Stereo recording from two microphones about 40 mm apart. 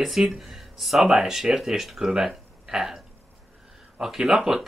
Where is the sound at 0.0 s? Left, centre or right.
Centre.